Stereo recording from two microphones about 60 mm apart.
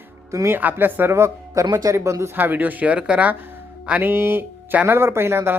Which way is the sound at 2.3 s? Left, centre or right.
Right.